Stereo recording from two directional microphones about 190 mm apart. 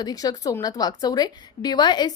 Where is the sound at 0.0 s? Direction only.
20° left (ahead or behind).